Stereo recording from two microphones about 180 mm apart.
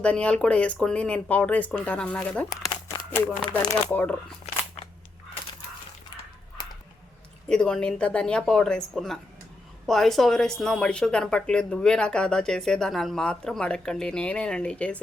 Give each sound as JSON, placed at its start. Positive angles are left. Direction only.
{"t": 0.0, "sound": "speech", "side_deg": 5}
{"t": 3.5, "sound": "speech", "side_deg": 10}
{"t": 7.4, "sound": "speech", "side_deg": 5}